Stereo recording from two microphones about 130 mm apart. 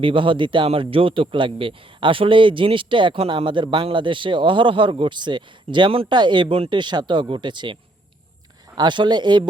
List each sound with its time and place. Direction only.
0.0 s speech: 40° right (ahead or behind)